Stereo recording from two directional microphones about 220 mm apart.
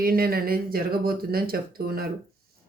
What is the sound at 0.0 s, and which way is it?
Speech, 40° right (ahead or behind).